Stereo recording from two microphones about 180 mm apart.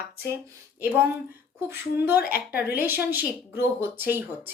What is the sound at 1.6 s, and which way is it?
Speech, 10° right (ahead or behind).